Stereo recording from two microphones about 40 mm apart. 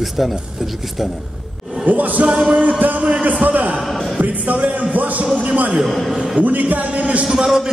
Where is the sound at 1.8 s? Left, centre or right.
Right.